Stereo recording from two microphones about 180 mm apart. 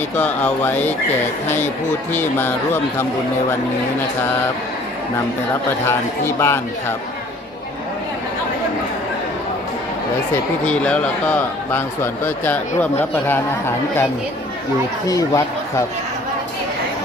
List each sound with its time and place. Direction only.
0.2 s speech: 10° left (ahead or behind)
5.9 s speech: 15° left (ahead or behind)
10.7 s speech: 5° left (ahead or behind)